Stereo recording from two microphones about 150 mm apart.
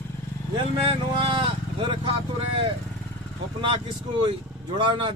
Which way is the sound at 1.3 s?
35° right (ahead or behind).